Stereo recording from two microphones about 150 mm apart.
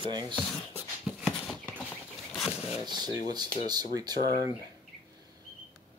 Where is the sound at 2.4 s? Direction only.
5° right (ahead or behind).